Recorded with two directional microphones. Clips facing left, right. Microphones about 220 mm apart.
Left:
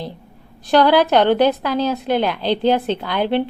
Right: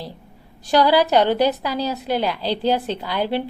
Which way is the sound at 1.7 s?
10° right (ahead or behind).